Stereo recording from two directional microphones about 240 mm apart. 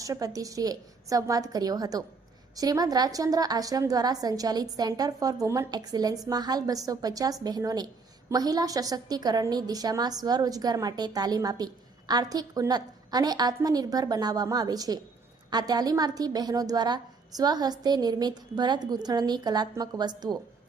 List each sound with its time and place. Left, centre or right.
0.0 s a woman's voice: centre